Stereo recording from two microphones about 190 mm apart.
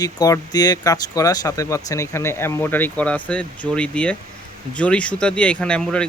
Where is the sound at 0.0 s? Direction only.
20° left (ahead or behind).